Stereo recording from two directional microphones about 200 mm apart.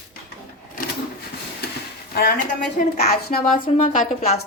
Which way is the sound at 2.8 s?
40° left (ahead or behind).